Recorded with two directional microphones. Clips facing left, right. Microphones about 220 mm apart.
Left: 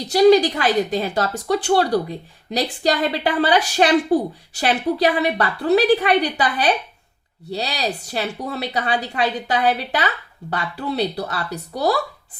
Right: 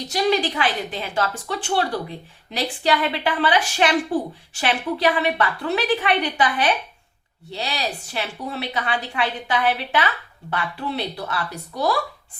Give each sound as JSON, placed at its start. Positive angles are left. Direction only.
{"t": 0.1, "sound": "a woman's voice", "side_deg": 40}